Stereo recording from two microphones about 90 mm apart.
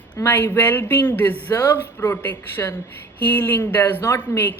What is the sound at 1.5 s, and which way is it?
Speech, 40° left (ahead or behind).